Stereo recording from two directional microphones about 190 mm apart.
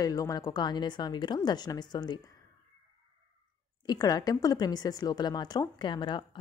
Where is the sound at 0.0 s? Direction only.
20° left (ahead or behind).